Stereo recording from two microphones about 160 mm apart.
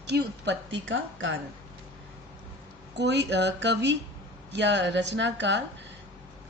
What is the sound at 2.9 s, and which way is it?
Speech, 90° right.